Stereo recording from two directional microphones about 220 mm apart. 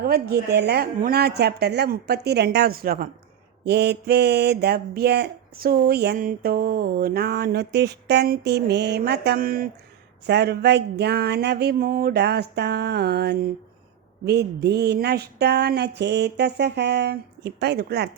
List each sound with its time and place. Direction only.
0.0 s mantra: 45° right (ahead or behind)